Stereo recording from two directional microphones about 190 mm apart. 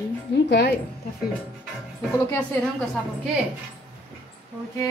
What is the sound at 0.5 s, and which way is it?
Speech, 60° left (ahead or behind).